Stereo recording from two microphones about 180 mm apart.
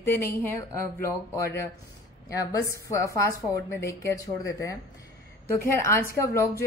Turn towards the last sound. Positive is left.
turn(degrees=15)  # may be behind; listen again after turning